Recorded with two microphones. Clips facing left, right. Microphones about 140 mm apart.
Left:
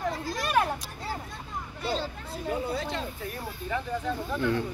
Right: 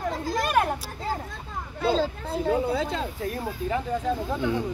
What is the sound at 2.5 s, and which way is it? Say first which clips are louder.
Speech: right 6 dB; 65° right (ahead or behind).